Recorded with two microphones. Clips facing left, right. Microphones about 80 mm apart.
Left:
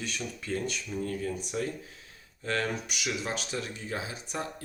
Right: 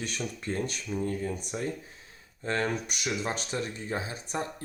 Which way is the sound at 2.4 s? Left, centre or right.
Right.